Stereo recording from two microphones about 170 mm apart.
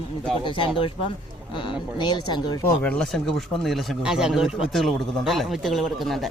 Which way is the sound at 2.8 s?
5° left (ahead or behind).